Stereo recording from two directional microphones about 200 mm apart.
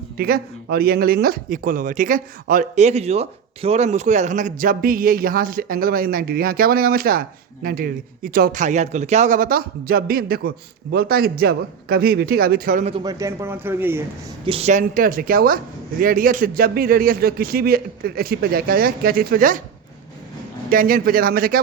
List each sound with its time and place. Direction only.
0.2 s speech: 50° right (ahead or behind)
12.8 s speech: 25° right (ahead or behind)
14.4 s speech: 30° right (ahead or behind)
20.7 s speech: 45° right (ahead or behind)